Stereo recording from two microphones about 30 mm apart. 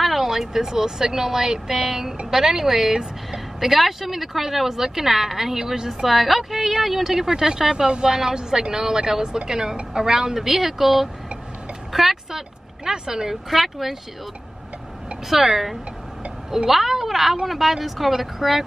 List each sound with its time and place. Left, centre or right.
0.0 s speech: centre
5.9 s speech: centre
7.2 s speech: centre
12.3 s speech: centre
13.5 s speech: centre
15.2 s speech: centre